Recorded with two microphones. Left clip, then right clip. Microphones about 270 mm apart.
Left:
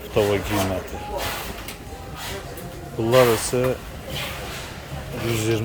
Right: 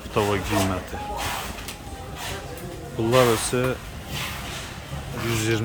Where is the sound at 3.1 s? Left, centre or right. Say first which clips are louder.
Left 2 dB; centre.